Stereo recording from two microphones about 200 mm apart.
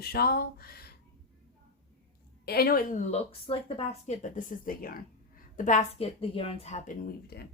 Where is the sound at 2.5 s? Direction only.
50° left (ahead or behind); by 6.9 s 35° left (ahead or behind).